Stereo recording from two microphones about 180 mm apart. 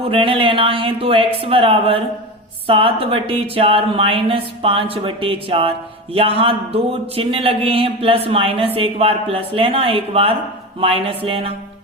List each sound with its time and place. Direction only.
0.0 s speech: 30° right (ahead or behind)